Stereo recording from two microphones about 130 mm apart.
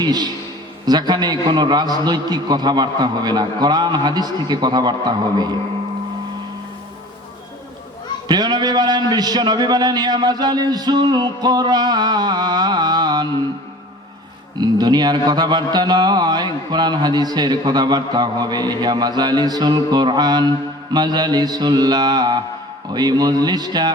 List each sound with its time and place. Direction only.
0.0 s a man's voice: 30° right (ahead or behind)
8.3 s speech: 35° right (ahead or behind)
14.6 s speech: 35° right (ahead or behind)